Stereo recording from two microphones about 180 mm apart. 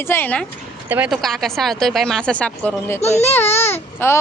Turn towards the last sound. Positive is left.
turn(degrees=15)  # may be behind; listen again after turning